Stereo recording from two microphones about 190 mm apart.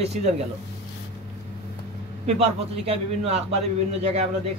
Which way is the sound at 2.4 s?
30° right (ahead or behind).